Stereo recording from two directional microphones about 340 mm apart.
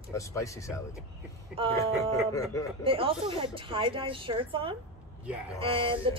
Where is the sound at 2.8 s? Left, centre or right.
Centre.